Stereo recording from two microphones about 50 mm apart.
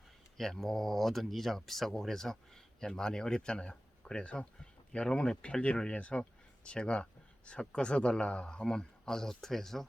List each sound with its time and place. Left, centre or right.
0.3 s speech: centre